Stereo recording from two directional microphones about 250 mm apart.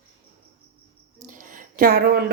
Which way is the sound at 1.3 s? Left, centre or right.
Right.